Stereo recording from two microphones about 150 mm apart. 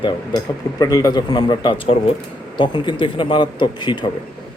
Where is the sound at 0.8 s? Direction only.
25° left (ahead or behind).